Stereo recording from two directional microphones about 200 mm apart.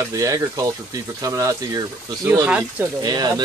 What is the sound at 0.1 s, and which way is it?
Speech, 15° right (ahead or behind).